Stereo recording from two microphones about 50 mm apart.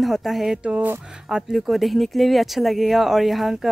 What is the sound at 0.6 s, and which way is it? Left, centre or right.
Speech, right.